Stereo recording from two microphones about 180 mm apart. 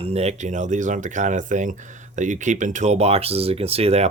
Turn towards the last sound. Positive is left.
turn(degrees=-35)  # may be behind; listen again after turning